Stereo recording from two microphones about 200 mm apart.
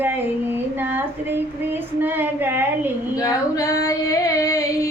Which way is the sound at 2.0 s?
10° right (ahead or behind).